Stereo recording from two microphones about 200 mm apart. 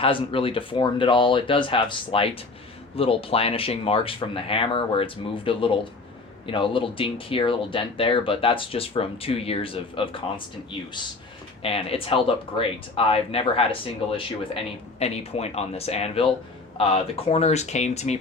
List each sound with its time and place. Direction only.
0.0 s speech: 25° left (ahead or behind)